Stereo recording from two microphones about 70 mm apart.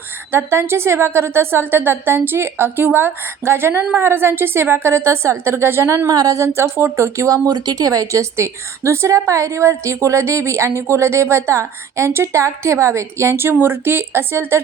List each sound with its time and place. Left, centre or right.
0.3 s a woman's voice: right
6.1 s speech: right
6.4 s a woman's voice: right
7.5 s a woman's voice: right